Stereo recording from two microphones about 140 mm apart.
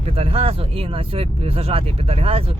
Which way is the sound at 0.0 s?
45° right (ahead or behind).